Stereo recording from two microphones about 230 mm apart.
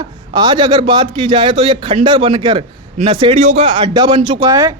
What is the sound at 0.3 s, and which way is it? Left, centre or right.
Speech, centre.